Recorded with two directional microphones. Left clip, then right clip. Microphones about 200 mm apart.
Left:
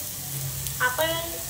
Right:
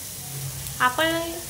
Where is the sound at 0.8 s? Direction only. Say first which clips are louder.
Right 3 dB; 65° right (ahead or behind).